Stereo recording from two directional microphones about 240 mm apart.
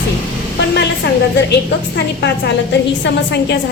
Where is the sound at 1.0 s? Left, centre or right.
Left.